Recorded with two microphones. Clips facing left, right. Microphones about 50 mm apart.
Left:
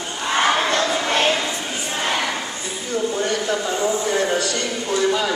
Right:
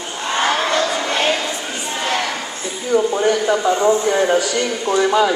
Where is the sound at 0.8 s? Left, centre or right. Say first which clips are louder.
Right 1 dB; centre.